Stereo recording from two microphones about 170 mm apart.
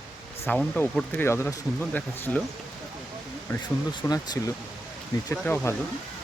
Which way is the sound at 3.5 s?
15° left (ahead or behind).